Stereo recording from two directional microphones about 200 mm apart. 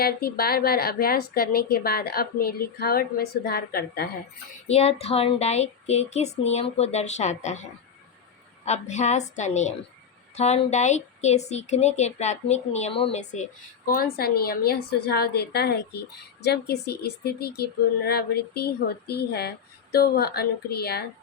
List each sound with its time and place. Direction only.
0.0 s speech: 50° left (ahead or behind)
4.7 s speech: 30° left (ahead or behind); by 21.0 s 50° left (ahead or behind)